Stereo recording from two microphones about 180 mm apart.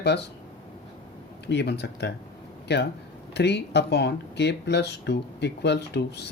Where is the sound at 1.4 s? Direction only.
70° left (ahead or behind).